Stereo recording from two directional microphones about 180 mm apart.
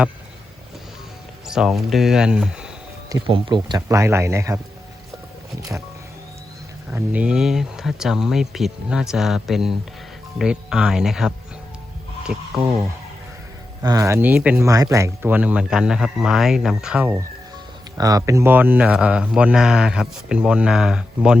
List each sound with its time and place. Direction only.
1.5 s speech: 5° right (ahead or behind)
3.1 s speech: 30° right (ahead or behind)
6.9 s speech: 10° right (ahead or behind)
13.8 s speech: 15° right (ahead or behind)
17.9 s speech: 20° right (ahead or behind); by 21.3 s 5° right (ahead or behind)